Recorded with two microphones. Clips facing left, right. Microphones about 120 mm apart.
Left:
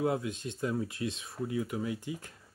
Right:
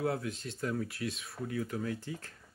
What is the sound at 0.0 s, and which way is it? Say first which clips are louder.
Speech: left 3 dB; 20° left (ahead or behind).